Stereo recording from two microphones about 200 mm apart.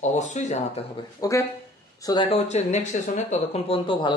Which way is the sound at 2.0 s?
20° left (ahead or behind).